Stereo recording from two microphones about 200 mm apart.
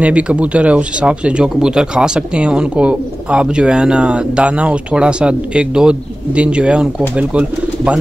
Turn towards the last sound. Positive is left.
turn(degrees=-5)  # may be behind; listen again after turning